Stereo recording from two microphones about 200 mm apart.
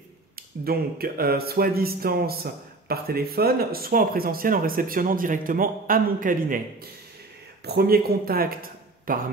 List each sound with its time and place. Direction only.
0.4 s speech: 50° right (ahead or behind)
7.6 s speech: 50° right (ahead or behind)